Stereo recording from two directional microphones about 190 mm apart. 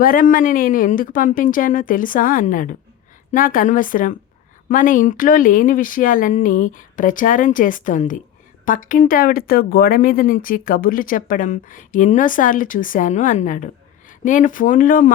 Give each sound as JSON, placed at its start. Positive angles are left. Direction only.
{"t": 0.0, "sound": "speech", "side_deg": 45}